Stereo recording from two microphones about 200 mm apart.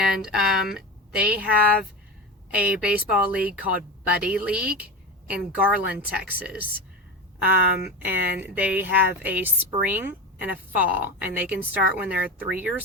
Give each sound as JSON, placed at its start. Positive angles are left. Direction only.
{"t": 0.0, "sound": "speech", "side_deg": -5}
{"t": 7.9, "sound": "speech", "side_deg": -10}